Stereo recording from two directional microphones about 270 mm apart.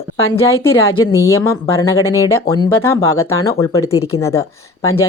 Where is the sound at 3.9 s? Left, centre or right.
Left.